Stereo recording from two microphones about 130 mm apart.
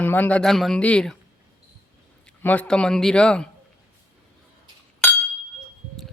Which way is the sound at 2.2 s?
10° left (ahead or behind).